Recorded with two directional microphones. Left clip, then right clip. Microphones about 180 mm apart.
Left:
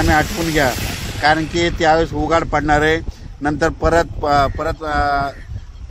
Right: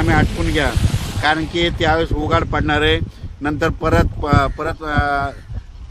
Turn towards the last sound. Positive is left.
turn(degrees=55)  # may be behind; listen again after turning